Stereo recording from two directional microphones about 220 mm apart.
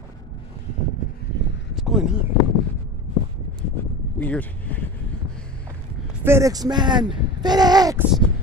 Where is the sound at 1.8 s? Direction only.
Centre (ahead or behind).